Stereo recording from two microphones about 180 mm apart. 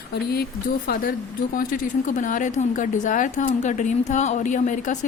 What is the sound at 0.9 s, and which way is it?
Speech, 55° left (ahead or behind).